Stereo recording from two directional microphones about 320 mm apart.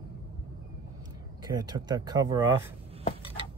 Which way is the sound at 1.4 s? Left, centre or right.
Centre.